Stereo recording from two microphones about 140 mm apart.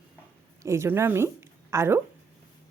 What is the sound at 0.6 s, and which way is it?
A woman's voice, 20° right (ahead or behind).